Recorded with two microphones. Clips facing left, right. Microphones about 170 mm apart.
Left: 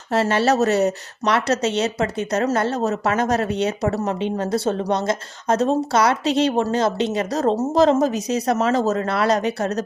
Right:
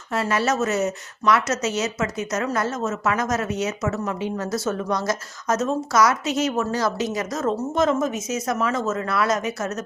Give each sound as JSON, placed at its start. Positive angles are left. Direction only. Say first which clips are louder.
{"t": 0.1, "sound": "a woman's voice", "louder": "left 4 dB", "side_deg": 30}
{"t": 4.2, "sound": "a woman's voice", "louder": "left 4 dB", "side_deg": 25}